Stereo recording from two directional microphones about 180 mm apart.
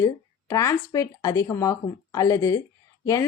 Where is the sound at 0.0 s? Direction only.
15° left (ahead or behind).